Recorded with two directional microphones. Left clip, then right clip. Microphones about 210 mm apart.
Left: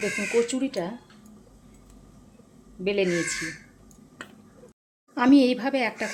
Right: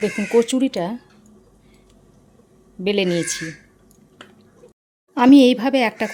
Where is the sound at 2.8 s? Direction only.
45° right (ahead or behind).